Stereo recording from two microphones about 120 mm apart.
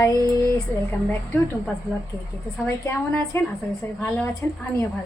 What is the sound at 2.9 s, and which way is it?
A woman's voice, 15° left (ahead or behind).